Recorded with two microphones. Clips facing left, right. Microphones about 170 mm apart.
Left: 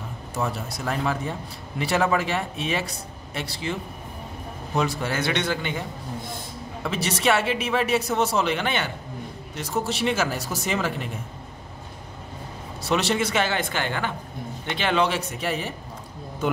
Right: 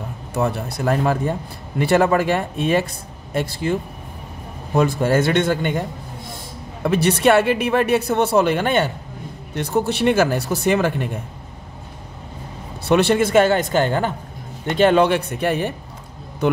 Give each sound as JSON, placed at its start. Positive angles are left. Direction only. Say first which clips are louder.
{"t": 0.3, "sound": "a woman's voice", "louder": "right 6 dB", "side_deg": -60}
{"t": 4.7, "sound": "a woman's voice", "louder": "right 8 dB", "side_deg": -50}
{"t": 9.6, "sound": "a woman's voice", "louder": "right 7 dB", "side_deg": -60}
{"t": 12.8, "sound": "a woman's voice", "louder": "right 7 dB", "side_deg": -55}